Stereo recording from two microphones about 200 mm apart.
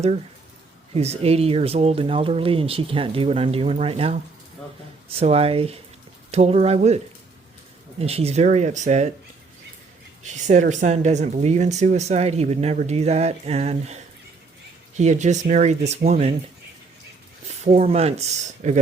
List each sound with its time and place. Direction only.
0.9 s speech: 30° right (ahead or behind)
10.2 s speech: 35° right (ahead or behind)
17.5 s speech: 30° right (ahead or behind)